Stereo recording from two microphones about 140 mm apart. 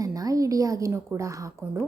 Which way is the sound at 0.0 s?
25° right (ahead or behind).